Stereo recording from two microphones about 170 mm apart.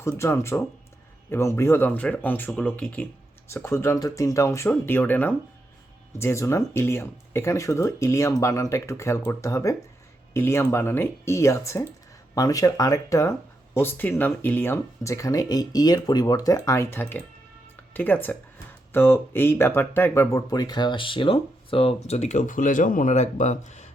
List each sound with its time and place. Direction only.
0.2 s speech: 15° left (ahead or behind); by 23.9 s 45° left (ahead or behind)